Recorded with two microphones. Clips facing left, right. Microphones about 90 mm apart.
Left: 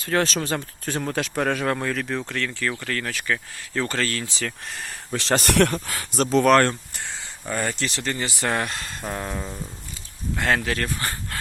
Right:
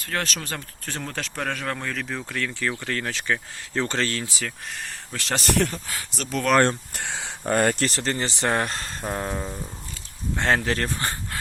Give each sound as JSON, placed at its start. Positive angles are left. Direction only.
{"t": 0.0, "sound": "speech", "side_deg": 25}
{"t": 2.3, "sound": "speech", "side_deg": -15}
{"t": 4.4, "sound": "speech", "side_deg": 0}
{"t": 5.3, "sound": "speech", "side_deg": 55}
{"t": 6.9, "sound": "speech", "side_deg": -65}
{"t": 7.4, "sound": "speech", "side_deg": -55}
{"t": 9.0, "sound": "a sound", "side_deg": -15}
{"t": 10.3, "sound": "speech", "side_deg": -30}